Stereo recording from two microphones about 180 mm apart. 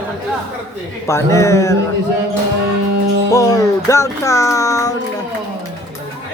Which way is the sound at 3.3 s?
20° left (ahead or behind).